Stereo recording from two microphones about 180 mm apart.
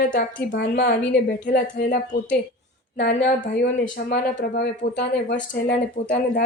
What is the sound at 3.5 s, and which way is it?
Speech, 70° left (ahead or behind).